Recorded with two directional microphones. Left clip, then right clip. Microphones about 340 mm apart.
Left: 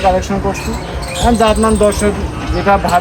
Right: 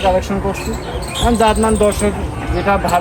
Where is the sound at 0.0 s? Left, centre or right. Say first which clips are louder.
Left 2 dB; centre.